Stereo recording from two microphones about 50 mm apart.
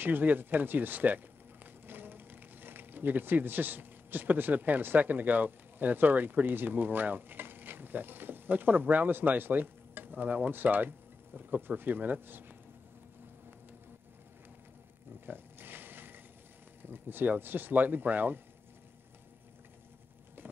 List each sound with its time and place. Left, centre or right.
0.0 s speech: right
15.1 s a sound: right
16.8 s speech: right